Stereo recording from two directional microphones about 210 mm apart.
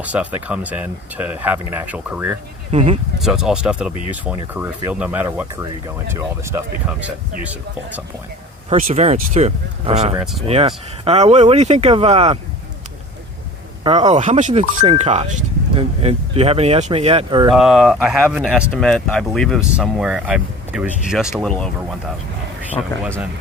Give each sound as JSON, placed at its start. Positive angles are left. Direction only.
{"t": 0.0, "sound": "speech", "side_deg": -5}
{"t": 2.7, "sound": "speech", "side_deg": -30}
{"t": 3.2, "sound": "speech", "side_deg": 0}
{"t": 4.4, "sound": "speech", "side_deg": -15}
{"t": 8.7, "sound": "speech", "side_deg": -30}
{"t": 13.8, "sound": "speech", "side_deg": -30}
{"t": 17.5, "sound": "speech", "side_deg": 0}